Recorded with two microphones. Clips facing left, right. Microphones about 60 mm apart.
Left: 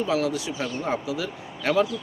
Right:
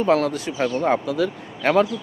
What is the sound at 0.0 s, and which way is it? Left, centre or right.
Speech, right.